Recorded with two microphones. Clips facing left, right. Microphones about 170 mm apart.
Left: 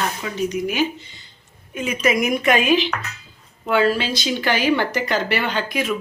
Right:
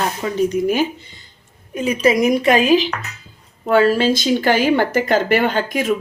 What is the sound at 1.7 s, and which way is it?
Speech, 35° right (ahead or behind).